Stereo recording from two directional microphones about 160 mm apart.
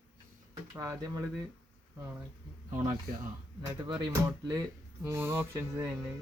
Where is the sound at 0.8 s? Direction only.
20° right (ahead or behind).